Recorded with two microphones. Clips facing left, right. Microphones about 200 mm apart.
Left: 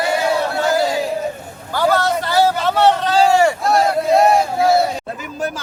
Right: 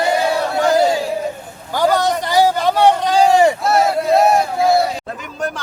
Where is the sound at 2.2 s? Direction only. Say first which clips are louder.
Right 1 dB; 15° right (ahead or behind).